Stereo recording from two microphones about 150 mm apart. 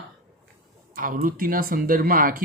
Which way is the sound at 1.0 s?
65° right (ahead or behind).